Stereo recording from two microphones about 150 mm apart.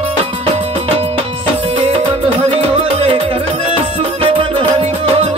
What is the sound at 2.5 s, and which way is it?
Music, 40° right (ahead or behind).